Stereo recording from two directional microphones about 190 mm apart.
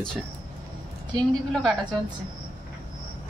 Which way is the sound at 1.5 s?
Centre (ahead or behind).